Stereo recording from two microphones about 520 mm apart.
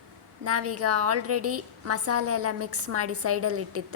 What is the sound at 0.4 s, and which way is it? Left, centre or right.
A woman's voice, right.